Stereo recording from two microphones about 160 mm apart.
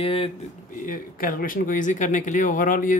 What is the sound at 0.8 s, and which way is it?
Speech, 60° left (ahead or behind).